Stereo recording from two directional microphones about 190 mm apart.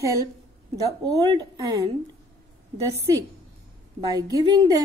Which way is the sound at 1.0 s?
20° right (ahead or behind).